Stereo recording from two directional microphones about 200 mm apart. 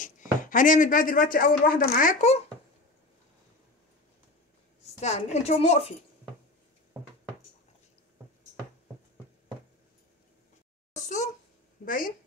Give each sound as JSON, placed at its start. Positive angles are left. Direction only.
{"t": 0.4, "sound": "speech", "side_deg": 40}
{"t": 5.0, "sound": "speech", "side_deg": 35}
{"t": 11.0, "sound": "a sound", "side_deg": 35}
{"t": 11.8, "sound": "speech", "side_deg": 45}